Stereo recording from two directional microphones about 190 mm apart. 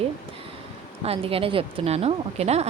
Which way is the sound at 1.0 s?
30° right (ahead or behind).